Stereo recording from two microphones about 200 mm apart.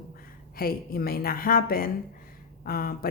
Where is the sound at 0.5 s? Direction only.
45° left (ahead or behind).